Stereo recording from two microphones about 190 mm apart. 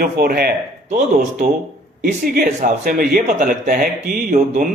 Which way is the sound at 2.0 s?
45° right (ahead or behind).